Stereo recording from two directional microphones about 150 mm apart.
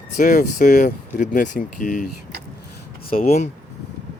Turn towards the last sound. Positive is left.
turn(degrees=50)  # may be behind; listen again after turning